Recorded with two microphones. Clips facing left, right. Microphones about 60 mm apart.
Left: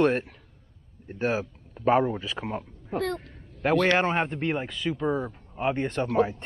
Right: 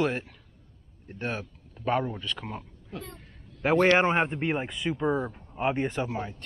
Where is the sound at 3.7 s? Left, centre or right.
Right.